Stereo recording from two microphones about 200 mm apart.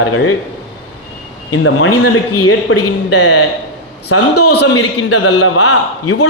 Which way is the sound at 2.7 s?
90° left.